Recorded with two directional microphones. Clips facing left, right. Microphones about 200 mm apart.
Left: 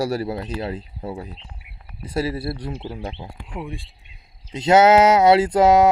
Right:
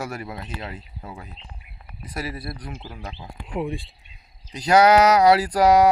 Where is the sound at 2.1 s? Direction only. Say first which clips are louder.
Left 8 dB; 30° left (ahead or behind).